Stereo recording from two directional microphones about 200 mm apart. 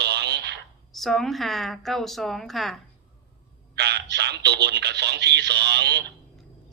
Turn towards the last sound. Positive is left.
turn(degrees=-55)  # may be behind; listen again after turning